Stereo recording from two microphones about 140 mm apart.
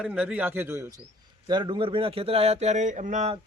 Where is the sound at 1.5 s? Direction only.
35° right (ahead or behind); by 3.3 s 60° right (ahead or behind).